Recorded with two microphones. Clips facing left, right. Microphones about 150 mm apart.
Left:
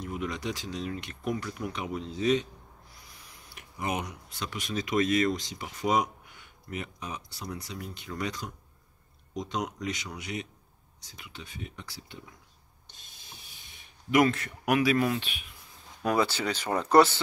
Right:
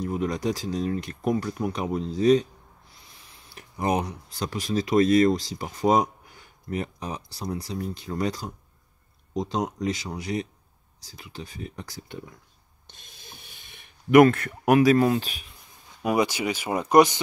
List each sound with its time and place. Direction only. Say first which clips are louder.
0.0 s speech: right 7 dB; 35° right (ahead or behind)
2.9 s a sound: even; 25° right (ahead or behind)
3.7 s speech: right 7 dB; 35° right (ahead or behind)
12.9 s a sound: right 4 dB; 55° right (ahead or behind)
14.6 s speech: right 7 dB; 40° right (ahead or behind)
16.0 s speech: right 3 dB; 10° right (ahead or behind)